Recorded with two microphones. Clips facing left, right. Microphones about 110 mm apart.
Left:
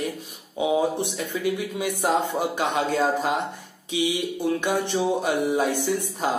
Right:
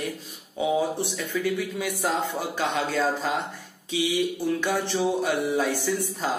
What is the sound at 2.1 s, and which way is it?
Speech, 55° left (ahead or behind).